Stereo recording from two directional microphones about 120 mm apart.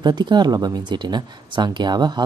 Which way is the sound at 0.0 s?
40° right (ahead or behind).